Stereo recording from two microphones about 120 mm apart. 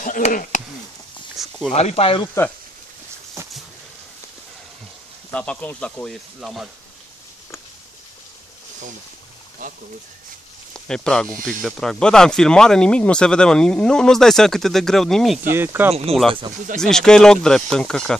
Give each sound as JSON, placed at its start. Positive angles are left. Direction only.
{"t": 0.0, "sound": "speech", "side_deg": 90}
{"t": 1.3, "sound": "a sound", "side_deg": 0}
{"t": 1.8, "sound": "speech", "side_deg": 60}
{"t": 2.4, "sound": "speech", "side_deg": 25}
{"t": 3.4, "sound": "a sound", "side_deg": -25}
{"t": 5.3, "sound": "speech", "side_deg": 10}
{"t": 10.7, "sound": "speech", "side_deg": 5}
{"t": 15.5, "sound": "speech", "side_deg": -20}
{"t": 15.9, "sound": "speech", "side_deg": -60}
{"t": 16.8, "sound": "speech", "side_deg": 5}